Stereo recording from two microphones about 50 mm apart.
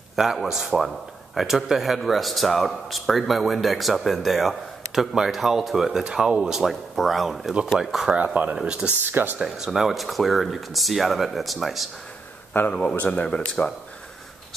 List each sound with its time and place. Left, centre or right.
0.1 s speech: centre
7.5 s speech: centre
7.8 s speech: centre
8.5 s speech: centre
9.0 s speech: right
9.4 s speech: centre
12.8 s speech: left